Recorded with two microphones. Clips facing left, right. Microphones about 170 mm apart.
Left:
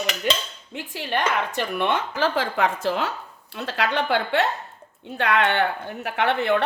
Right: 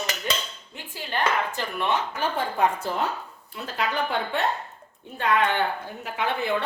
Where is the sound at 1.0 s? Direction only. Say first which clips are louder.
Left 2 dB; 70° left (ahead or behind); by 3.1 s 90° left.